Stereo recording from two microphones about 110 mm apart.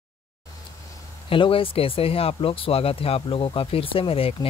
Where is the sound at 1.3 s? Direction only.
55° left (ahead or behind).